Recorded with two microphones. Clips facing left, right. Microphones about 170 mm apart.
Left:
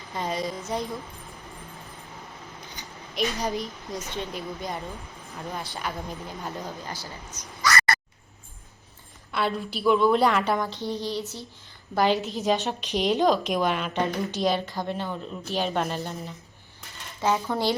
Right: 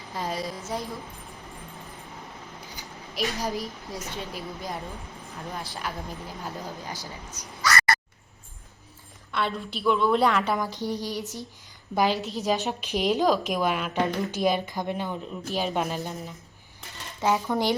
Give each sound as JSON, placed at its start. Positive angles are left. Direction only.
{"t": 0.1, "sound": "a woman's voice", "side_deg": 0}
{"t": 2.6, "sound": "a woman's voice", "side_deg": 0}
{"t": 6.9, "sound": "speech", "side_deg": -15}
{"t": 9.3, "sound": "a woman's voice", "side_deg": 0}
{"t": 10.8, "sound": "speech", "side_deg": -10}
{"t": 11.9, "sound": "a woman's voice", "side_deg": 0}
{"t": 15.4, "sound": "a woman's voice", "side_deg": -5}
{"t": 17.2, "sound": "speech", "side_deg": -15}